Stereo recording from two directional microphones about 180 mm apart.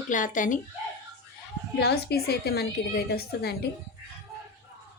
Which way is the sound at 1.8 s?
65° left (ahead or behind).